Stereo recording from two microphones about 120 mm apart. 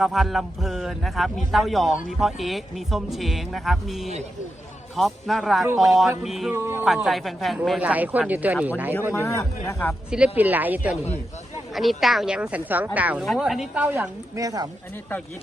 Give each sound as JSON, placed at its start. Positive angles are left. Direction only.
{"t": 0.0, "sound": "speech", "side_deg": 0}
{"t": 6.5, "sound": "a man's voice", "side_deg": -20}
{"t": 6.8, "sound": "speech", "side_deg": 0}
{"t": 7.8, "sound": "a woman's voice", "side_deg": -10}
{"t": 9.1, "sound": "a man's voice", "side_deg": 25}
{"t": 10.1, "sound": "a woman's voice", "side_deg": -10}
{"t": 11.7, "sound": "a woman's voice", "side_deg": 0}
{"t": 13.2, "sound": "speech", "side_deg": 0}
{"t": 14.3, "sound": "a man's voice", "side_deg": -30}